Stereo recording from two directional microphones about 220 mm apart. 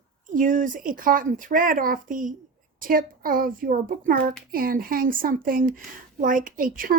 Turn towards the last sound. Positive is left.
turn(degrees=-40)  # may be behind; listen again after turning